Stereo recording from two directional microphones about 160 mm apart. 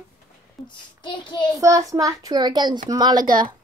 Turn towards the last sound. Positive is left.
turn(degrees=-25)  # may be behind; listen again after turning